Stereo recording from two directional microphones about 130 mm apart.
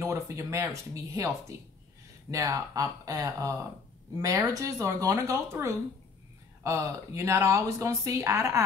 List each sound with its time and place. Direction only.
0.0 s speech: 20° right (ahead or behind)
2.3 s speech: 25° right (ahead or behind)